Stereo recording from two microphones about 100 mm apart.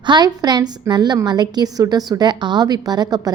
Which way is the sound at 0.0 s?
45° right (ahead or behind).